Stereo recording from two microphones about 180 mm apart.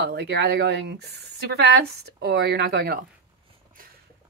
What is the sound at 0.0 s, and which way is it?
A woman's voice, 65° right (ahead or behind).